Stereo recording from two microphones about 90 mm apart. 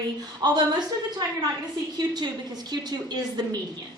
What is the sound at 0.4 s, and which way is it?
Speech, 50° right (ahead or behind).